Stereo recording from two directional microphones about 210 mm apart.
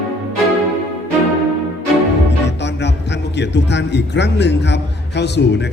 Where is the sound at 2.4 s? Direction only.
55° left (ahead or behind).